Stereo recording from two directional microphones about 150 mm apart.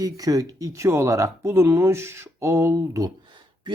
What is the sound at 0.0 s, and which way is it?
Speech, 25° right (ahead or behind).